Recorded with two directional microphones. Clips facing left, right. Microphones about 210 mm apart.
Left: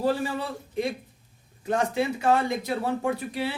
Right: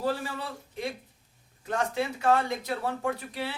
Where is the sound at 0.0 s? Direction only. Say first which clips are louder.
Left 5 dB; 15° left (ahead or behind).